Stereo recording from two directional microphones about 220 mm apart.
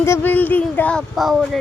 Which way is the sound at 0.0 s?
10° left (ahead or behind).